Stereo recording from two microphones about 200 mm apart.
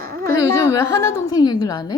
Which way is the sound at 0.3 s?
15° left (ahead or behind).